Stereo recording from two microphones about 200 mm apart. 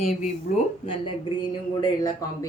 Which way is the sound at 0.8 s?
25° left (ahead or behind).